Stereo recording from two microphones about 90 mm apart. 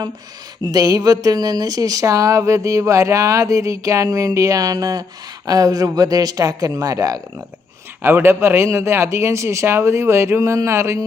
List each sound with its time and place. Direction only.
0.6 s speech: 45° right (ahead or behind)
8.0 s speech: 25° right (ahead or behind)